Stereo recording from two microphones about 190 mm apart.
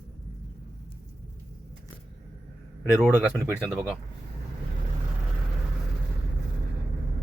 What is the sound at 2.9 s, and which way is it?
Speech, 5° right (ahead or behind).